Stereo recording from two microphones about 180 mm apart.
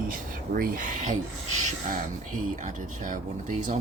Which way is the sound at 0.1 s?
55° right (ahead or behind).